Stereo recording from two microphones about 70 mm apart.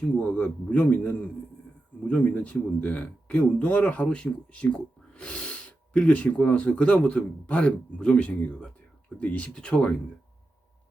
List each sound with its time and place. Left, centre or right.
0.2 s speech: left